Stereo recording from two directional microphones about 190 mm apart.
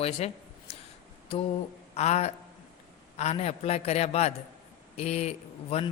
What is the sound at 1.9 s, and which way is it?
A man's voice, 35° left (ahead or behind).